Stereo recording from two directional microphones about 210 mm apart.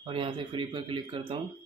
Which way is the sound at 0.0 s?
25° right (ahead or behind).